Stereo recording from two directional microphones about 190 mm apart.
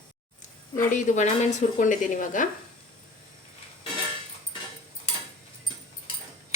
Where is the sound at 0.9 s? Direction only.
40° left (ahead or behind).